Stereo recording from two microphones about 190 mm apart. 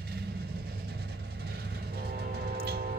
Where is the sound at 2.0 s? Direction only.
60° right (ahead or behind).